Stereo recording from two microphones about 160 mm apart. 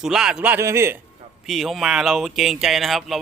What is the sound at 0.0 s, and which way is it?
Speech, 5° right (ahead or behind).